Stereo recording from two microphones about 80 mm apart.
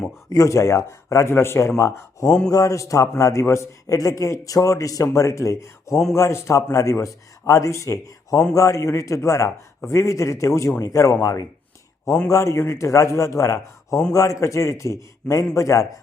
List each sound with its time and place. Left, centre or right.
0.3 s a man's voice: left